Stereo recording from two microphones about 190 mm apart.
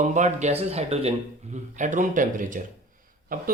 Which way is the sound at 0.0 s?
40° right (ahead or behind).